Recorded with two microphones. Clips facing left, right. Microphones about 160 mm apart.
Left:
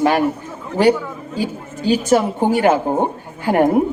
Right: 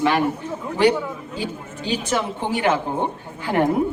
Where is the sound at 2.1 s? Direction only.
40° left (ahead or behind).